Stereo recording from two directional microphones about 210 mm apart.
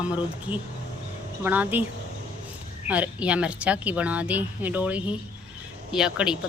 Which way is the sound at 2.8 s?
5° right (ahead or behind).